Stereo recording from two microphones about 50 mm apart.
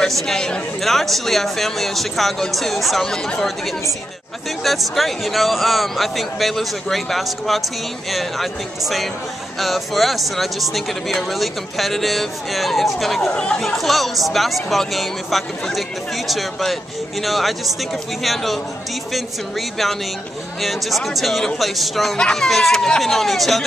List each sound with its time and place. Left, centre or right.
0.1 s a man's voice: centre
4.6 s speech: centre
13.3 s speech: centre
13.6 s speech: centre
20.6 s speech: centre